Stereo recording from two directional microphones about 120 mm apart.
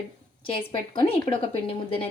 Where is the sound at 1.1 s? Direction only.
50° left (ahead or behind).